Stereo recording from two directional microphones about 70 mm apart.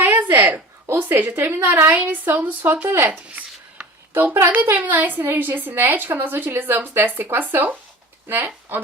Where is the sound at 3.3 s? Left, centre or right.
Right.